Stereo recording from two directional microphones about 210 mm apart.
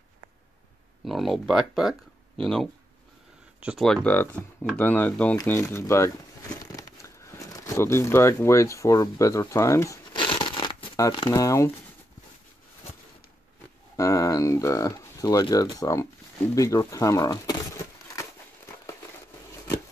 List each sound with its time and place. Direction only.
1.0 s speech: centre (ahead or behind)
10.3 s a sound: 25° left (ahead or behind)
11.0 s speech: 20° left (ahead or behind)
13.9 s speech: 15° left (ahead or behind)